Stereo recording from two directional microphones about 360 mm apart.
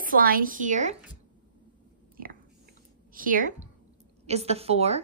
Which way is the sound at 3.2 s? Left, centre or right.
Right.